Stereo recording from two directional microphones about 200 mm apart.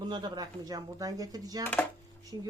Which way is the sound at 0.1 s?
20° right (ahead or behind).